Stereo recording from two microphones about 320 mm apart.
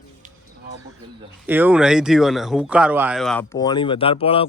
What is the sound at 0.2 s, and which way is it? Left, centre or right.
Bird, right.